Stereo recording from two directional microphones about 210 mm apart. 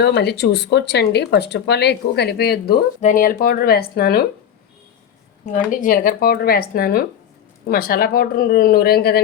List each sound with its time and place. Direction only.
0.0 s speech: 55° left (ahead or behind)
5.7 s speech: 40° left (ahead or behind)